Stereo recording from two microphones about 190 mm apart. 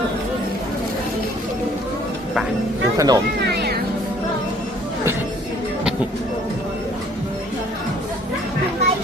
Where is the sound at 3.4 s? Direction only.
60° right (ahead or behind).